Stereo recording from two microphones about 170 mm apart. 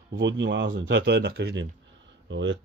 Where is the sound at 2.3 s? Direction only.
90° right.